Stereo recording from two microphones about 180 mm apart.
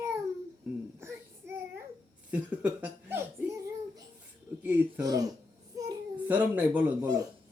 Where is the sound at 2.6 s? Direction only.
10° right (ahead or behind).